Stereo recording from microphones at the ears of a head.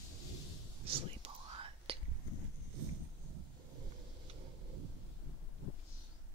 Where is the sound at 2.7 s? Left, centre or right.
Right.